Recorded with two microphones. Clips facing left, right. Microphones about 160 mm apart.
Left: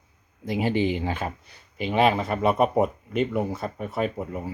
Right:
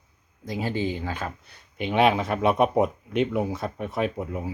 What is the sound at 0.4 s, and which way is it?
Speech, 15° left (ahead or behind).